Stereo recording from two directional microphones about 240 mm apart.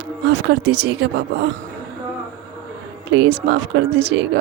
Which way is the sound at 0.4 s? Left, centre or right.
Right.